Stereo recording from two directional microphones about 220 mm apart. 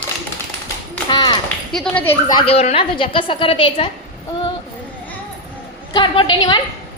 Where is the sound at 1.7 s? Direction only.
5° left (ahead or behind); by 3.9 s 25° left (ahead or behind).